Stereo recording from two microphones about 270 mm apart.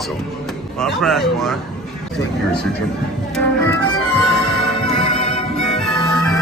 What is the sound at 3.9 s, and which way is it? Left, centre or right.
Music, left.